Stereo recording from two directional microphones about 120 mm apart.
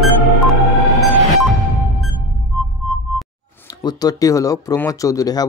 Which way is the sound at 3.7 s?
35° left (ahead or behind).